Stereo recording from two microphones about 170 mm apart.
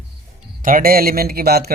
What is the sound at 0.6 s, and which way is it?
Speech, 55° right (ahead or behind).